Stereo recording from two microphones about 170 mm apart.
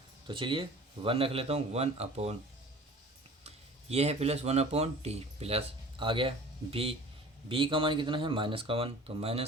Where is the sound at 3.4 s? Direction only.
40° right (ahead or behind).